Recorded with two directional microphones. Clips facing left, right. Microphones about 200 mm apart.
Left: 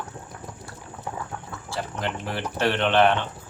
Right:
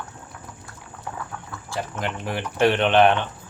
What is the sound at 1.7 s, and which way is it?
Speech, 15° right (ahead or behind).